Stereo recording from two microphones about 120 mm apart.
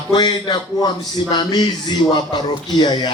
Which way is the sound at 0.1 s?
40° left (ahead or behind).